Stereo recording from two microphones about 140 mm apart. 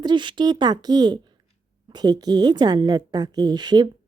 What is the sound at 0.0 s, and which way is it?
A woman's voice, 35° right (ahead or behind).